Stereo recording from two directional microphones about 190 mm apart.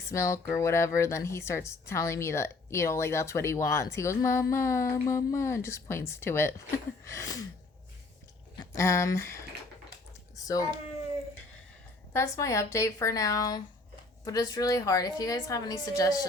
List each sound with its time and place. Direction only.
0.1 s speech: 15° left (ahead or behind)
8.5 s speech: 15° left (ahead or behind)
10.3 s typing: 20° left (ahead or behind)
12.1 s a woman's voice: 15° left (ahead or behind)